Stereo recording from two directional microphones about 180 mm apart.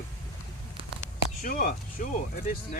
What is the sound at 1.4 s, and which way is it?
Speech, 55° left (ahead or behind).